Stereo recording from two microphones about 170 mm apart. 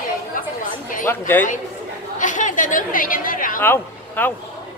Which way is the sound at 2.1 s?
50° left (ahead or behind).